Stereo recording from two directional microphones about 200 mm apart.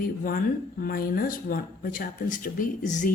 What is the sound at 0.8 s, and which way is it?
Speech, 45° left (ahead or behind).